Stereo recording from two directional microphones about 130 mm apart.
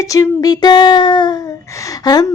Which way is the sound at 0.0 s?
25° left (ahead or behind).